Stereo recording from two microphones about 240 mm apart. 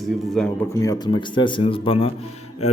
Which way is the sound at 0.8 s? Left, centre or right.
Centre.